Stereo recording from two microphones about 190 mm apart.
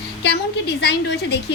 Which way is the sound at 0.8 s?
65° left (ahead or behind).